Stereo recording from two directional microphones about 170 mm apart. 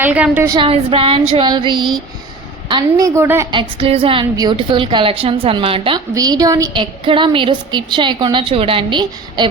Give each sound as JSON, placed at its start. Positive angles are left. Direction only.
{"t": 0.0, "sound": "a woman's voice", "side_deg": -10}
{"t": 0.5, "sound": "a woman's voice", "side_deg": -30}
{"t": 3.2, "sound": "a woman's voice", "side_deg": -15}
{"t": 3.5, "sound": "a woman's voice", "side_deg": -30}
{"t": 6.1, "sound": "a woman's voice", "side_deg": -20}